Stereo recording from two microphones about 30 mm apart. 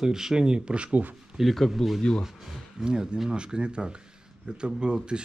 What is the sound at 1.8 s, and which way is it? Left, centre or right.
Speech, centre.